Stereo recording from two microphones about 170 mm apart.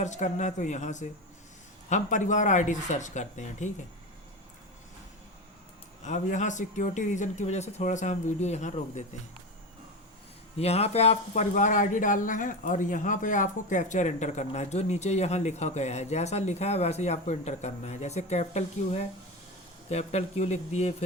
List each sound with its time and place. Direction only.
0.0 s speech: 45° left (ahead or behind)
6.1 s speech: 45° left (ahead or behind)
10.6 s speech: 35° left (ahead or behind)